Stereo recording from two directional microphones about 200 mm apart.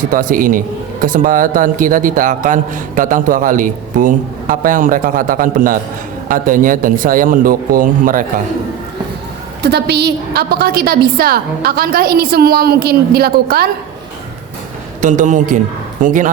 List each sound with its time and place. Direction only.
0.1 s a man's voice: 40° right (ahead or behind)
9.6 s a man's voice: 55° right (ahead or behind)
15.0 s a man's voice: 40° right (ahead or behind)